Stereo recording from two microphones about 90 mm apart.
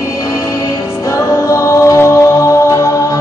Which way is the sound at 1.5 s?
35° left (ahead or behind).